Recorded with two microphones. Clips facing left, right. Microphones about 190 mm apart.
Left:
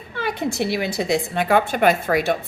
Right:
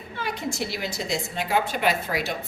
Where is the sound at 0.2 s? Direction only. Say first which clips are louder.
Left 6 dB; 60° left (ahead or behind).